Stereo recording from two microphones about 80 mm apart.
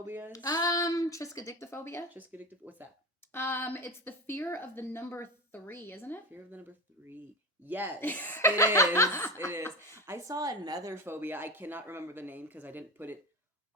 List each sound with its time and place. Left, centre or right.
0.0 s speech: right
0.3 s speech: left
2.1 s speech: right
3.3 s a woman's voice: left
7.6 s speech: right
8.0 s a woman's voice: left
8.4 s speech: left
9.9 s speech: right
10.9 s speech: right